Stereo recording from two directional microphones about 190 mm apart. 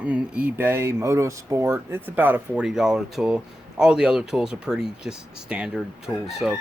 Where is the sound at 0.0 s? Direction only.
5° right (ahead or behind).